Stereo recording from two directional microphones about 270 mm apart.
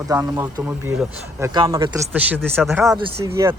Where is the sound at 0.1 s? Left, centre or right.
Centre.